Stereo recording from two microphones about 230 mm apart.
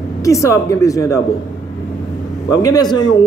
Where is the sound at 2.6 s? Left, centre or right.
Centre.